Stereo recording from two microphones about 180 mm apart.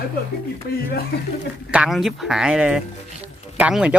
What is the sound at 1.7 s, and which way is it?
Speech, 5° right (ahead or behind).